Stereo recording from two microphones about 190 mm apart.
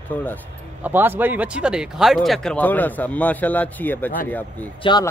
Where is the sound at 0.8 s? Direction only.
10° right (ahead or behind); by 4.6 s 10° left (ahead or behind).